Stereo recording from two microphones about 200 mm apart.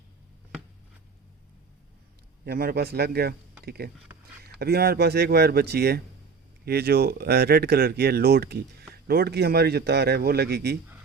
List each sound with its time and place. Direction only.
2.4 s speech: 50° right (ahead or behind)